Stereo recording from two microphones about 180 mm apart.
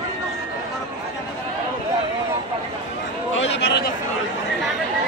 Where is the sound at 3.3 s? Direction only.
85° left.